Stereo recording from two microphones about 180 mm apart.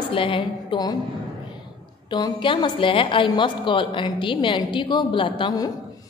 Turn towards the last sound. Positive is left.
turn(degrees=25)  # may be behind; listen again after turning